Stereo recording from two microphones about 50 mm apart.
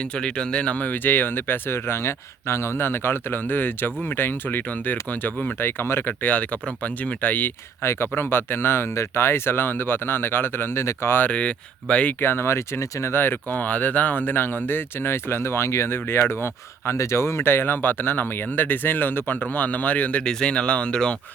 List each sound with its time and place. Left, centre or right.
0.0 s speech: left
6.2 s speech: left
7.8 s speech: left
11.3 s speech: left
12.2 s speech: left
13.1 s speech: left
16.0 s speech: left
20.2 s speech: centre